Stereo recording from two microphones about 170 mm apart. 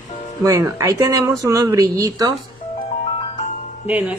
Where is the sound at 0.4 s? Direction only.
20° right (ahead or behind).